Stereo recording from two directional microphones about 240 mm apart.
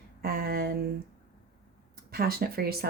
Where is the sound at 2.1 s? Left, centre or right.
Right.